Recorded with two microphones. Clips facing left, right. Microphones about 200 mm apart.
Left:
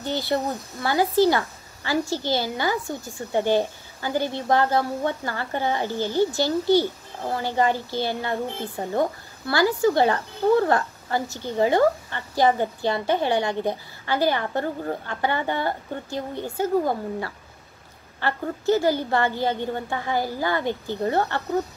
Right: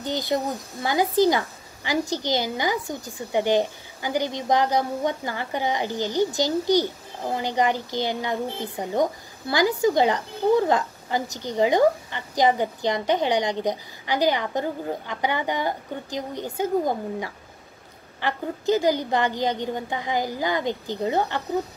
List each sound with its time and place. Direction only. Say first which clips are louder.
0.0 s a woman's voice: even; 15° right (ahead or behind)